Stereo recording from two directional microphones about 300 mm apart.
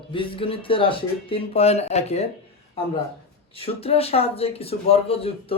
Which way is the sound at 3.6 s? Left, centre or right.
Centre.